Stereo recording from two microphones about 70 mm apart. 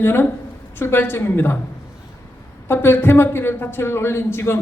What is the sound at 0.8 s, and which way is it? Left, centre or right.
Speech, left.